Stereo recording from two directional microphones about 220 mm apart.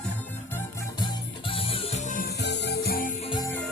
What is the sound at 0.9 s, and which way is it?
Music, 20° left (ahead or behind).